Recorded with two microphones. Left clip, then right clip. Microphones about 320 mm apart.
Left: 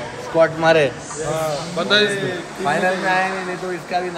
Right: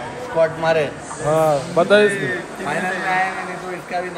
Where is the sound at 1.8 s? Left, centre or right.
Centre.